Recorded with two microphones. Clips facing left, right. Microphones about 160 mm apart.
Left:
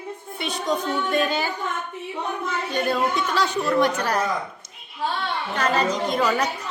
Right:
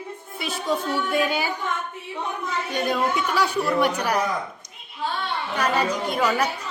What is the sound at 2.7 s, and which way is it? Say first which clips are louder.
A woman's voice: left 1 dB; 10° right (ahead or behind).